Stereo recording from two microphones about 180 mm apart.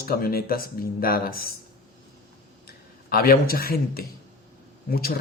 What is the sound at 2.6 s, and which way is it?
A man's voice, 55° left (ahead or behind).